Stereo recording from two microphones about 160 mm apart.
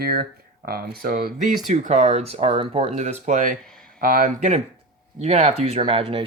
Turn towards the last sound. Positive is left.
turn(degrees=-35)  # may be behind; listen again after turning